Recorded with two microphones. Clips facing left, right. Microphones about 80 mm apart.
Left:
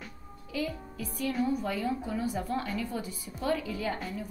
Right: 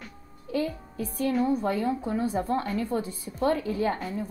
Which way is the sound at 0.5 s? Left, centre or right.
Right.